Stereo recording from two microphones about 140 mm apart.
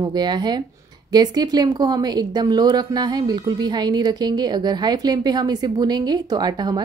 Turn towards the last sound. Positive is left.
turn(degrees=-30)  # may be behind; listen again after turning